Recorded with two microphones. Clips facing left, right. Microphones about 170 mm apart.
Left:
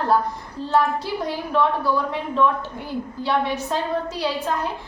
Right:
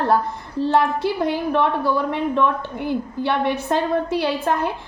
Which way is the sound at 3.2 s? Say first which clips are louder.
Even; 60° right (ahead or behind).